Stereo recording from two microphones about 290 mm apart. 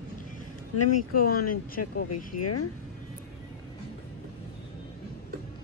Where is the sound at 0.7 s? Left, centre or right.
Left.